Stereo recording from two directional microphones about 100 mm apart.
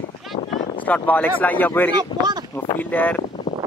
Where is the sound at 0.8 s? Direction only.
15° left (ahead or behind).